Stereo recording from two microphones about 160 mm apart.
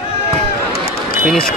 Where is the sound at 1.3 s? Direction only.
5° left (ahead or behind).